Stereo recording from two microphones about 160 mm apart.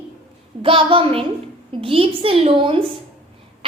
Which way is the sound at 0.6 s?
35° right (ahead or behind).